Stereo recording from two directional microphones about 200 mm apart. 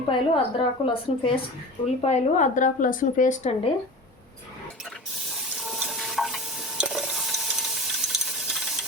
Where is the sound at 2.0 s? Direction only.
35° left (ahead or behind).